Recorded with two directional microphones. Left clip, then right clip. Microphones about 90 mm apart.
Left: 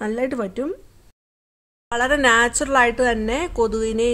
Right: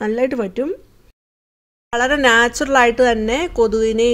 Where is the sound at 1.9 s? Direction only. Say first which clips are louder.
Right 3 dB; 30° right (ahead or behind).